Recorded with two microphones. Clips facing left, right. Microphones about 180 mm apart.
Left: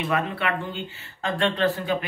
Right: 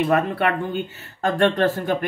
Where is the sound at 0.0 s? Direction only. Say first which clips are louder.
Right 6 dB; 45° right (ahead or behind).